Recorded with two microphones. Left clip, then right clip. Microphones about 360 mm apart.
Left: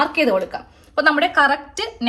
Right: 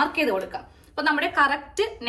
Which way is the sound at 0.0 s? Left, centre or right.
Left.